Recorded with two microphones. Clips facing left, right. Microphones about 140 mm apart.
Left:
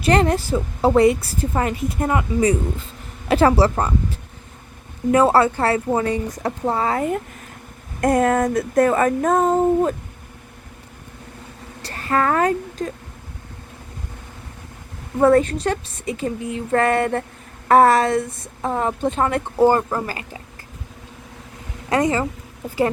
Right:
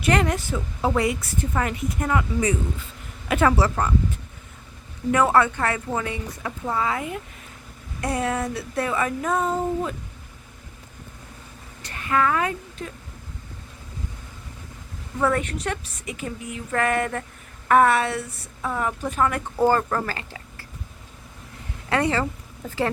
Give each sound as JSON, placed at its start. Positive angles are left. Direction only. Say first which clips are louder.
{"t": 0.0, "sound": "a woman's voice", "louder": "left 5 dB", "side_deg": 30}
{"t": 5.1, "sound": "a woman's voice", "louder": "left 4 dB", "side_deg": 30}
{"t": 8.0, "sound": "child singing", "louder": "left 8 dB", "side_deg": 50}
{"t": 11.8, "sound": "a woman's voice", "louder": "left 2 dB", "side_deg": 35}
{"t": 15.2, "sound": "a woman's voice", "louder": "left 9 dB", "side_deg": 35}
{"t": 19.6, "sound": "speech", "louder": "left 3 dB", "side_deg": 15}